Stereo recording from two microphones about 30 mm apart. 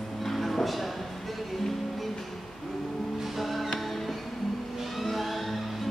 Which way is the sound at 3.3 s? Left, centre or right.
Centre.